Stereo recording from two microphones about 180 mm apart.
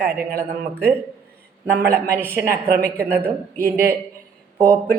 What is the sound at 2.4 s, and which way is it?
Speech, 60° right (ahead or behind).